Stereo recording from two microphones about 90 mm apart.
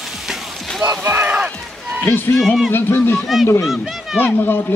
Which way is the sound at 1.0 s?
20° right (ahead or behind).